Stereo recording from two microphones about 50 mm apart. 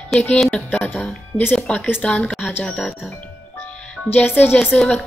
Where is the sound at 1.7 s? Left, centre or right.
Left.